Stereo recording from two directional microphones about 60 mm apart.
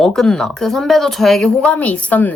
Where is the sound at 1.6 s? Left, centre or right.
Left.